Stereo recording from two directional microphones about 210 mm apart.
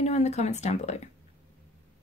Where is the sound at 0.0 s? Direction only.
30° left (ahead or behind).